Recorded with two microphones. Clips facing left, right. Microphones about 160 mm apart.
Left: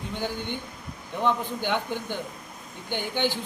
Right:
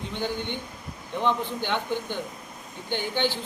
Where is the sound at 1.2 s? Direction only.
10° left (ahead or behind).